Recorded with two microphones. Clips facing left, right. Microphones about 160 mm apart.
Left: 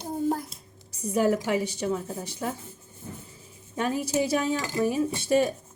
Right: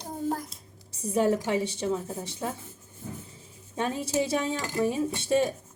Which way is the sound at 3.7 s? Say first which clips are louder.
Left 2 dB; 25° right (ahead or behind).